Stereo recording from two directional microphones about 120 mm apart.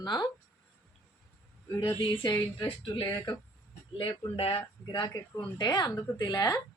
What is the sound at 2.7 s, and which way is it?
Speech, 45° left (ahead or behind).